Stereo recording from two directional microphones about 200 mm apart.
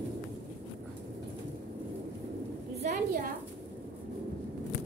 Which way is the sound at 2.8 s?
40° right (ahead or behind).